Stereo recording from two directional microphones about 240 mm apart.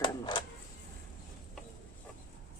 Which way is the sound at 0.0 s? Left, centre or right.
Centre.